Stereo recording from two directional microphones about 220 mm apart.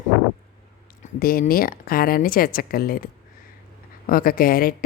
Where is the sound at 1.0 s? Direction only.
40° left (ahead or behind).